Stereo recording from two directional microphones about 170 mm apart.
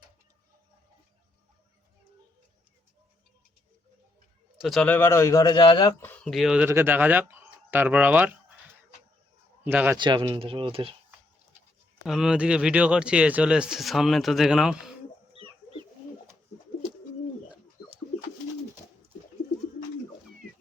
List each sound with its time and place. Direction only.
4.5 s a man's voice: centre (ahead or behind); by 5.9 s 25° left (ahead or behind)
6.0 s speech: 10° left (ahead or behind)
6.7 s speech: 15° right (ahead or behind)
9.6 s speech: 10° right (ahead or behind)
10.0 s speech: 30° right (ahead or behind)
12.0 s speech: 5° right (ahead or behind)